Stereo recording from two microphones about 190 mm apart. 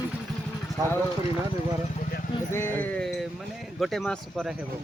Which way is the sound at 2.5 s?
10° left (ahead or behind).